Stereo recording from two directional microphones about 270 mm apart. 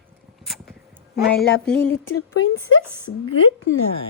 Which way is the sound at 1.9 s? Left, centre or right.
Left.